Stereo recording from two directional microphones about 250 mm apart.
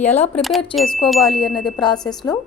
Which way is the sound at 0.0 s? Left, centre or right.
Left.